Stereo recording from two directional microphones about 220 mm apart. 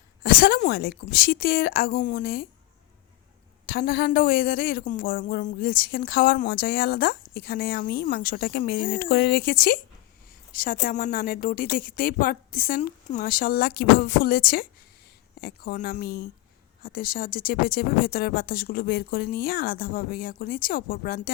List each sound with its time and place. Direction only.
0.2 s a woman's voice: 40° left (ahead or behind)
3.7 s a woman's voice: 45° left (ahead or behind)